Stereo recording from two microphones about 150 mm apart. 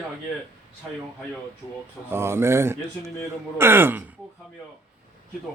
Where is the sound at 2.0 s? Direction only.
15° right (ahead or behind).